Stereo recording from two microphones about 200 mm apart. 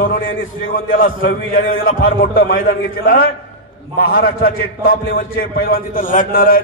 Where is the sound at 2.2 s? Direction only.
50° left (ahead or behind).